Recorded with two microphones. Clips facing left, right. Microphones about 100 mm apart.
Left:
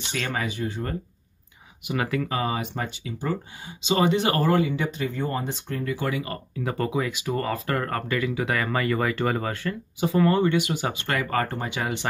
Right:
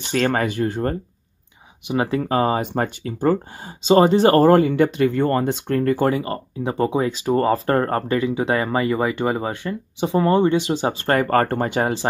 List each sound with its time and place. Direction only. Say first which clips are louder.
0.0 s speech: right 9 dB; 55° right (ahead or behind)
1.9 s speech: right 6 dB; 25° right (ahead or behind); by 3.3 s 50° right (ahead or behind)
3.8 s speech: right 8 dB; 40° right (ahead or behind); by 5.9 s 60° right (ahead or behind)
5.9 s speech: right 8 dB; 40° right (ahead or behind)
11.8 s speech: right 4 dB; 35° right (ahead or behind)